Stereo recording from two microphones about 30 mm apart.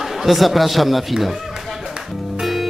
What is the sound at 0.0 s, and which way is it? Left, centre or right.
Speech, centre.